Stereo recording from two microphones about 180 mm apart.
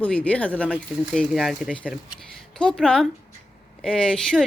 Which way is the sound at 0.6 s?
5° right (ahead or behind).